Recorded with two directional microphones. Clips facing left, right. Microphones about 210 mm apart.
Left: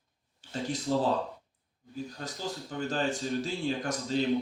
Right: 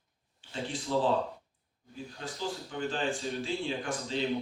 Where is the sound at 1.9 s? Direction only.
40° left (ahead or behind).